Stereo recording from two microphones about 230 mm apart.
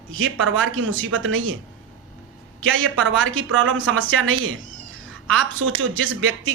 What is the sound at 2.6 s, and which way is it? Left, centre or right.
A man's voice, right.